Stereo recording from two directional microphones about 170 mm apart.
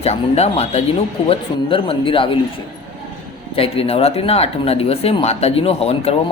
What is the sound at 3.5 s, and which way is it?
Speech, 35° left (ahead or behind).